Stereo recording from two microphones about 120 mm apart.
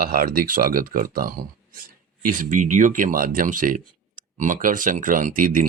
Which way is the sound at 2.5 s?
90° right.